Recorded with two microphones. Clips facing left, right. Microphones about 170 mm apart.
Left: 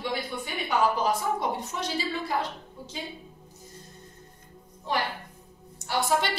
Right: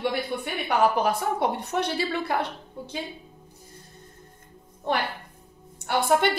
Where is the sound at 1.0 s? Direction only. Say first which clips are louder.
Right 3 dB; 65° right (ahead or behind).